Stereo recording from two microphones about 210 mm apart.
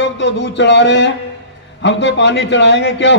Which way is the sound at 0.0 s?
55° left (ahead or behind).